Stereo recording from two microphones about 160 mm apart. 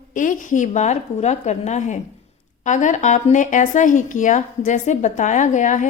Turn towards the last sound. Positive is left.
turn(degrees=50)  # may be behind; listen again after turning